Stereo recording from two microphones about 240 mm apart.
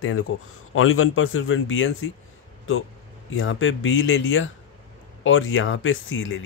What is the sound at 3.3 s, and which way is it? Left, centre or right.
A man's voice, left.